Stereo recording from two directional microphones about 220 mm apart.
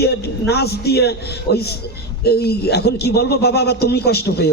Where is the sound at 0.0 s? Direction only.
45° left (ahead or behind).